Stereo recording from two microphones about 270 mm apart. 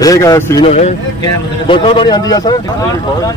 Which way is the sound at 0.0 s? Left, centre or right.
Centre.